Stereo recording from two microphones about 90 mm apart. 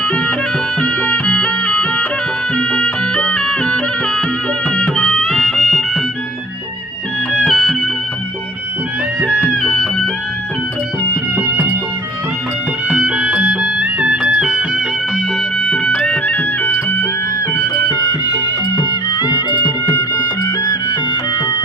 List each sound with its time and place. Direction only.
0.0 s music: 10° left (ahead or behind)
7.4 s music: centre (ahead or behind)
9.6 s music: 10° left (ahead or behind)
11.3 s music: 20° right (ahead or behind)
12.9 s music: 10° right (ahead or behind)
15.5 s music: 10° left (ahead or behind)
17.5 s music: 35° left (ahead or behind); by 19.7 s 55° left (ahead or behind)
19.9 s music: 35° left (ahead or behind)